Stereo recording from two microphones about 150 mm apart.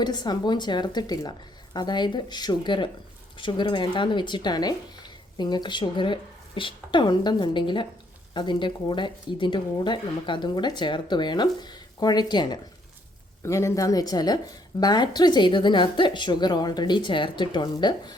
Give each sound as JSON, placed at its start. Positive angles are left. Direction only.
{"t": 0.0, "sound": "a woman's voice", "side_deg": 30}
{"t": 13.4, "sound": "a woman's voice", "side_deg": 20}